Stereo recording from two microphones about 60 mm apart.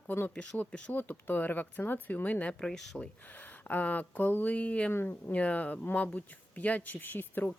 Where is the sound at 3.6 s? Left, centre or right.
Left.